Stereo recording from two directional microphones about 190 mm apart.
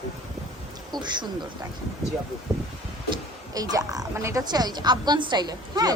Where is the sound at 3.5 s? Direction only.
20° right (ahead or behind).